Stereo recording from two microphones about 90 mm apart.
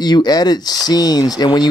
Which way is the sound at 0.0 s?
50° left (ahead or behind).